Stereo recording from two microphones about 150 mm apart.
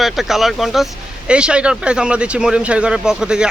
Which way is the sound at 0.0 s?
Centre (ahead or behind).